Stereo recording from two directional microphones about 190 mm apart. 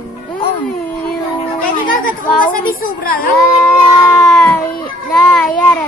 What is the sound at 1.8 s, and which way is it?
A woman's voice, 45° left (ahead or behind).